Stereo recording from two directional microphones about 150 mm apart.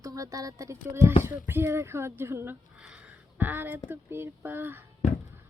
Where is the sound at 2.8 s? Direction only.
5° right (ahead or behind).